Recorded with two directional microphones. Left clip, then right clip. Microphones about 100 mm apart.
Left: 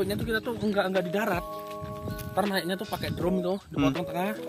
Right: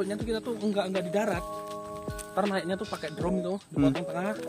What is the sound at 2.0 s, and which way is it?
Speech, centre (ahead or behind).